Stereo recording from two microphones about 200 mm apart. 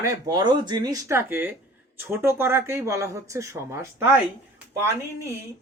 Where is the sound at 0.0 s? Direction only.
20° right (ahead or behind).